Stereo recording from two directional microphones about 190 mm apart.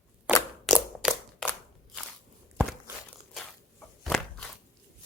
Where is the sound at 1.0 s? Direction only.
5° right (ahead or behind).